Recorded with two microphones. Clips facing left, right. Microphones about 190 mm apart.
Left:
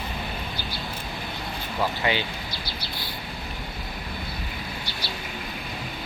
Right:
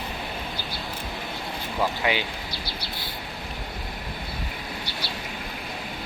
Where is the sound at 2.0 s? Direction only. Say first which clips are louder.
Left 1 dB; 5° right (ahead or behind).